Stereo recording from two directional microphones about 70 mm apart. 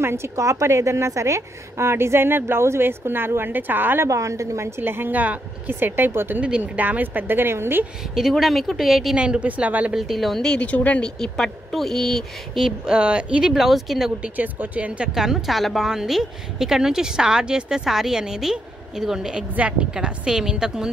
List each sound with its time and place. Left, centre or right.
0.0 s a woman's voice: right
4.1 s a woman's voice: right
6.4 s a woman's voice: centre; by 7.8 s right
8.1 s a woman's voice: centre; by 9.9 s right
9.9 s speech: centre
10.6 s speech: centre
11.1 s speech: centre
13.5 s speech: centre
14.2 s a woman's voice: right
15.1 s a woman's voice: centre